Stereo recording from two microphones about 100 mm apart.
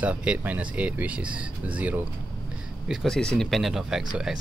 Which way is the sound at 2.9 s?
5° right (ahead or behind).